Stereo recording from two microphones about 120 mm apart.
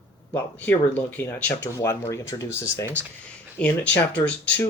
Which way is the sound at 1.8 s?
25° left (ahead or behind).